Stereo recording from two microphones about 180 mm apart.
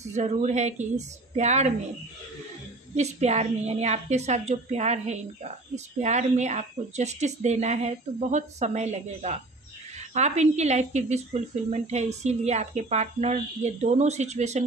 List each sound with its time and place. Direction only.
0.1 s a woman's voice: 40° right (ahead or behind)
3.0 s a woman's voice: 40° right (ahead or behind)